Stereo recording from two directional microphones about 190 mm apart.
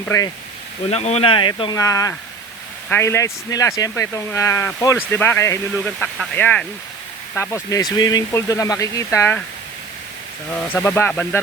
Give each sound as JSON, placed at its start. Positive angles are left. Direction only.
{"t": 0.0, "sound": "speech", "side_deg": 15}
{"t": 0.9, "sound": "speech", "side_deg": 35}
{"t": 10.7, "sound": "speech", "side_deg": 10}